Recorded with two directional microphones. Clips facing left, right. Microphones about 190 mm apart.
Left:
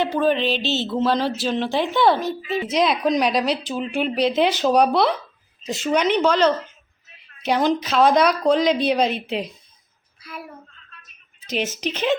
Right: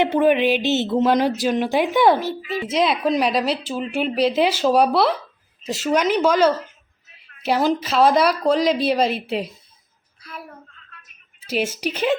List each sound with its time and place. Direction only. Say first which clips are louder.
0.0 s speech: right 3 dB; 20° right (ahead or behind)
2.6 s a woman's voice: even; 5° right (ahead or behind)
11.4 s speech: right 2 dB; 10° right (ahead or behind)